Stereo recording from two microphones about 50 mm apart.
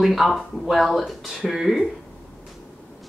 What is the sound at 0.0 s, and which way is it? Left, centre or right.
A woman's voice, centre.